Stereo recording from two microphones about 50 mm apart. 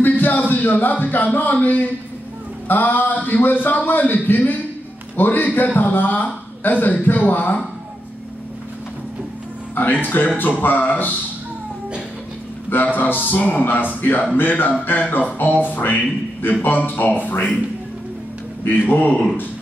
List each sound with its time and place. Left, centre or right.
0.0 s speech: left
10.0 s speech: left
12.8 s speech: left
18.7 s speech: left